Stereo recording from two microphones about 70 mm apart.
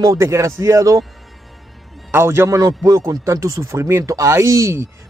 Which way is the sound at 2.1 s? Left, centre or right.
Right.